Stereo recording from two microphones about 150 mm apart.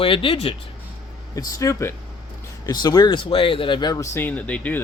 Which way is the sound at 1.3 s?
25° left (ahead or behind).